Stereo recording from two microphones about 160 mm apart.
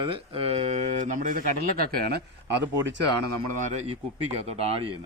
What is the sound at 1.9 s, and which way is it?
Speech, 70° right (ahead or behind).